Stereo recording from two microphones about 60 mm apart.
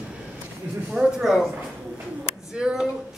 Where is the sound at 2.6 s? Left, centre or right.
Centre.